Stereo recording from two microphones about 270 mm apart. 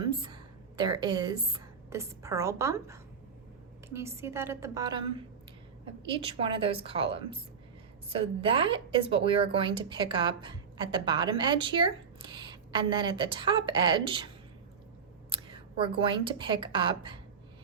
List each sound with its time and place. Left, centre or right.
0.0 s a woman's voice: centre
6.1 s a woman's voice: centre
15.3 s a woman's voice: centre